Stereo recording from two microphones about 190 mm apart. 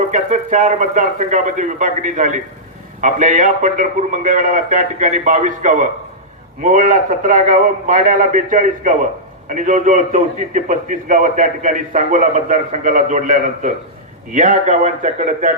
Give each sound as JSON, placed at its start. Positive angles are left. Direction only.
{"t": 0.1, "sound": "a man's voice", "side_deg": -40}